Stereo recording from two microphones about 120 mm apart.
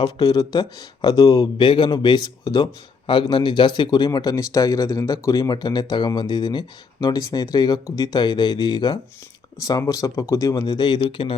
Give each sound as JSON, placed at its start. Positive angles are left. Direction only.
{"t": 0.0, "sound": "speech", "side_deg": 35}